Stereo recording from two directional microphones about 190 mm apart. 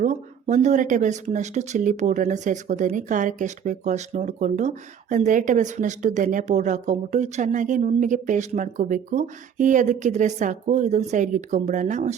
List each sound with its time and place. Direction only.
0.0 s speech: 40° right (ahead or behind)